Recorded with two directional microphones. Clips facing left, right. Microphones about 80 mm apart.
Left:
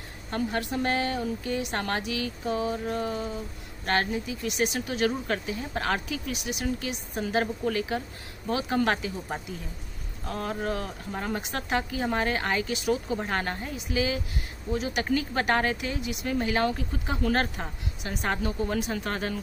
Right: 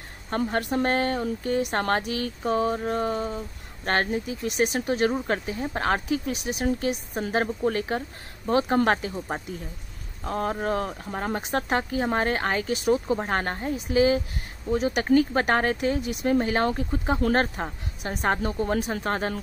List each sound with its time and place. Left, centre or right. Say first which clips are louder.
0.3 s speech: right 3 dB; right